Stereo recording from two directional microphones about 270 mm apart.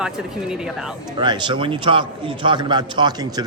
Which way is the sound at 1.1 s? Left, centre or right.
Centre.